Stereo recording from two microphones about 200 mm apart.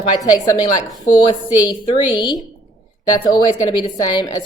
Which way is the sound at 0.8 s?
Centre (ahead or behind).